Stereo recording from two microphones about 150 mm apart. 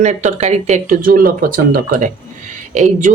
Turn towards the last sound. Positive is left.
turn(degrees=-55)  # may be behind; listen again after turning